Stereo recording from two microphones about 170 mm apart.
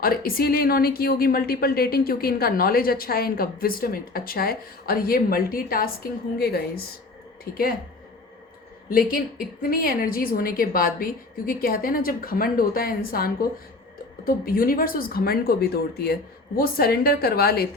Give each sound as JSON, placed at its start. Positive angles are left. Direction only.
{"t": 0.0, "sound": "a woman's voice", "side_deg": 60}
{"t": 8.9, "sound": "a woman's voice", "side_deg": 60}